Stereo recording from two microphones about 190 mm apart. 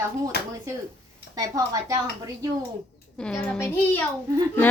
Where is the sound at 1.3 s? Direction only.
20° right (ahead or behind).